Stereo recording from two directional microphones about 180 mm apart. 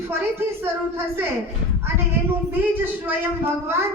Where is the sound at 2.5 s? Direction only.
10° right (ahead or behind).